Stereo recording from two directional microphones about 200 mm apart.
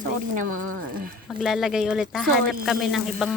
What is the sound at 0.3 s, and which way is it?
Speech, 40° right (ahead or behind).